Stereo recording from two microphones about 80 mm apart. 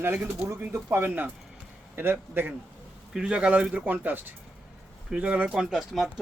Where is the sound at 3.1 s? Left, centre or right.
Centre.